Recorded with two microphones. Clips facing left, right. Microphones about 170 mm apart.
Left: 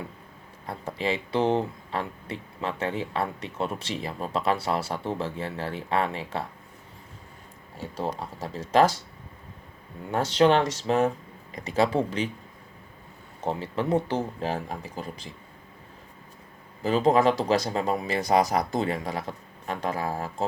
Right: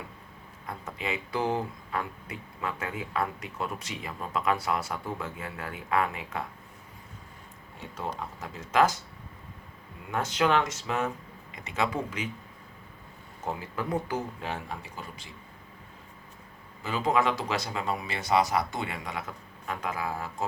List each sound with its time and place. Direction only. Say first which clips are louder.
0.7 s speech: left 6 dB; 30° left (ahead or behind)
7.8 s speech: left 5 dB; 35° left (ahead or behind)
10.1 s speech: left 6 dB; 30° left (ahead or behind)
13.4 s speech: left 5 dB; 30° left (ahead or behind)
16.8 s speech: left 6 dB; 35° left (ahead or behind)